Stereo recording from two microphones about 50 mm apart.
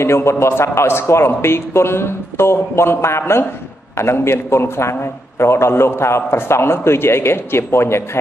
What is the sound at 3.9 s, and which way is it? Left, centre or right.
A man's voice, left.